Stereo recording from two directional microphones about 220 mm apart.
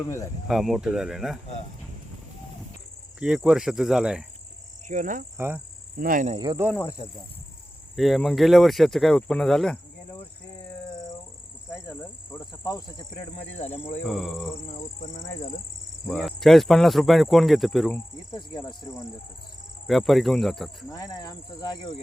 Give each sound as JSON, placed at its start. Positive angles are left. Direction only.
{"t": 0.4, "sound": "speech", "side_deg": 0}
{"t": 3.2, "sound": "speech", "side_deg": -5}
{"t": 4.9, "sound": "speech", "side_deg": -35}
{"t": 5.4, "sound": "cricket", "side_deg": -10}
{"t": 6.0, "sound": "speech", "side_deg": -40}
{"t": 6.3, "sound": "speech", "side_deg": -20}
{"t": 7.9, "sound": "speech", "side_deg": 0}
{"t": 11.7, "sound": "speech", "side_deg": 15}
{"t": 13.9, "sound": "speech", "side_deg": 0}
{"t": 14.7, "sound": "speech", "side_deg": 30}
{"t": 16.0, "sound": "speech", "side_deg": 0}
{"t": 18.3, "sound": "speech", "side_deg": 20}
{"t": 19.9, "sound": "speech", "side_deg": 0}
{"t": 20.9, "sound": "speech", "side_deg": 15}